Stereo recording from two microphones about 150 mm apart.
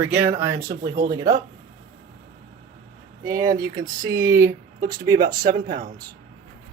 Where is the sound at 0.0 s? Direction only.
10° right (ahead or behind).